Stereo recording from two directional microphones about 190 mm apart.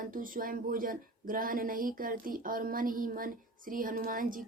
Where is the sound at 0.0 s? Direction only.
45° right (ahead or behind).